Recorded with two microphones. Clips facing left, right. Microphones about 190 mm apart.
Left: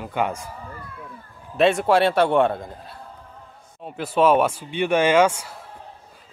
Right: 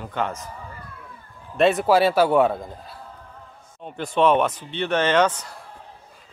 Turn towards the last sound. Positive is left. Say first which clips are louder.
# left 2 dB
turn(degrees=10)  # may be behind; listen again after turning